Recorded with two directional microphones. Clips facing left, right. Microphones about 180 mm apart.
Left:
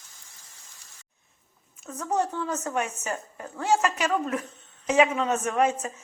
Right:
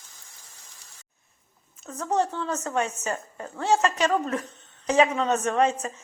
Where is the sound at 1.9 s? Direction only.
10° left (ahead or behind).